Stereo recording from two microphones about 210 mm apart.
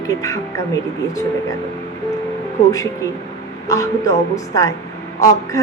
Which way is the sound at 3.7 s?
15° left (ahead or behind).